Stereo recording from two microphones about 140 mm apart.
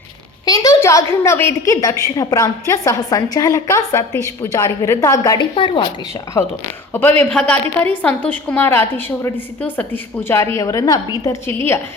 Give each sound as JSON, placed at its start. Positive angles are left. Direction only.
{"t": 0.4, "sound": "a woman's voice", "side_deg": 25}
{"t": 6.9, "sound": "a woman's voice", "side_deg": 10}